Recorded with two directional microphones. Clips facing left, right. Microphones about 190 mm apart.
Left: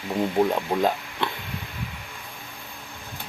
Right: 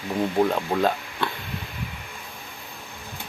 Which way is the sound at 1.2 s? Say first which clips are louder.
Even; 20° left (ahead or behind).